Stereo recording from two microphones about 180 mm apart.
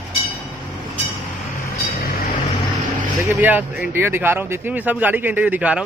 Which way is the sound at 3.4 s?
10° right (ahead or behind).